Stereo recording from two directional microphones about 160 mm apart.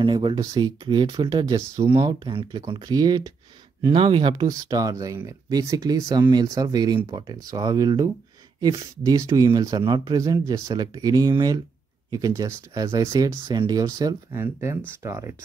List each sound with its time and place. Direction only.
0.0 s speech: 30° right (ahead or behind)